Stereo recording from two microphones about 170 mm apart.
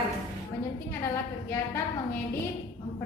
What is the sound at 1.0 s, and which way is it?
Speech, 15° left (ahead or behind).